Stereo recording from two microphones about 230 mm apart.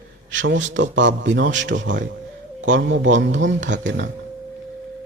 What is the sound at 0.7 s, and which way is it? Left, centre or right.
Speech, right.